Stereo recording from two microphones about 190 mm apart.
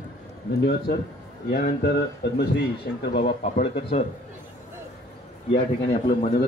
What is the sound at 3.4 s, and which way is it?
Speech, 35° left (ahead or behind).